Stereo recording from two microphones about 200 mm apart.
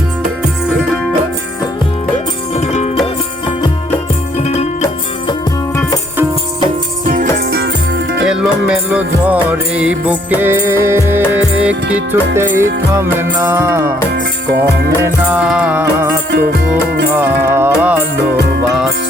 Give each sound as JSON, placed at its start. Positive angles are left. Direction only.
{"t": 2.6, "sound": "music", "side_deg": 35}
{"t": 5.3, "sound": "music", "side_deg": 20}
{"t": 7.3, "sound": "music", "side_deg": -55}
{"t": 8.2, "sound": "music", "side_deg": -5}
{"t": 15.0, "sound": "music", "side_deg": -5}
{"t": 16.3, "sound": "music", "side_deg": -55}
{"t": 17.2, "sound": "music", "side_deg": -10}